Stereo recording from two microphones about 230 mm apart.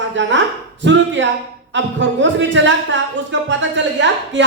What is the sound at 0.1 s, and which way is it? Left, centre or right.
Speech, right.